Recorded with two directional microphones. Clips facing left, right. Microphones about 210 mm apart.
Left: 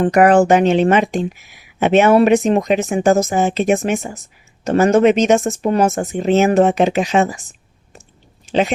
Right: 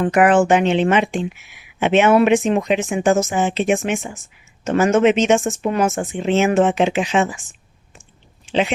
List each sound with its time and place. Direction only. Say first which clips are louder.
0.0 s speech: left 3 dB; 40° left (ahead or behind)